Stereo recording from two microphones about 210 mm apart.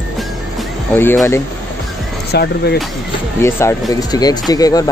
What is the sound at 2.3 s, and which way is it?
Speech, 50° left (ahead or behind).